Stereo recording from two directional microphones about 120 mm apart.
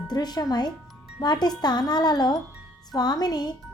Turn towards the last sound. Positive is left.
turn(degrees=35)  # may be behind; listen again after turning